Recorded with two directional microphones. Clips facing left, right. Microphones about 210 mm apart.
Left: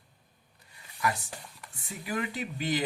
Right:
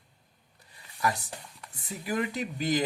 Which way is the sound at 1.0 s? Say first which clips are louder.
Right 1 dB; 40° right (ahead or behind).